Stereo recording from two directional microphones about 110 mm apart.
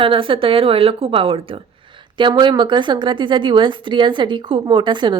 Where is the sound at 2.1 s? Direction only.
45° right (ahead or behind).